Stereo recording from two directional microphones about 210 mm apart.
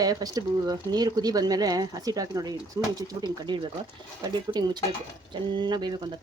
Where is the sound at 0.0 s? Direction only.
20° right (ahead or behind).